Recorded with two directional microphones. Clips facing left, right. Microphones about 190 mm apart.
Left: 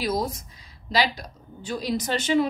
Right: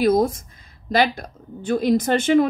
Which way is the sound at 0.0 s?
55° right (ahead or behind).